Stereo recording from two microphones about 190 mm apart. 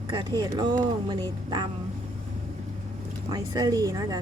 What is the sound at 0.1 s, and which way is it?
Speech, 25° right (ahead or behind).